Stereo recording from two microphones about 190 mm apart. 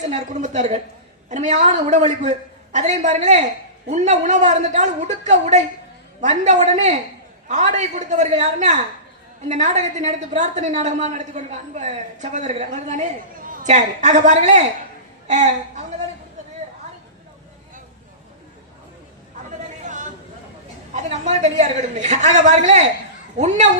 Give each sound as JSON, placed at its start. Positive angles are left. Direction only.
{"t": 0.1, "sound": "a woman's voice", "side_deg": -40}
{"t": 19.5, "sound": "a sound", "side_deg": -40}
{"t": 20.9, "sound": "a woman's voice", "side_deg": -35}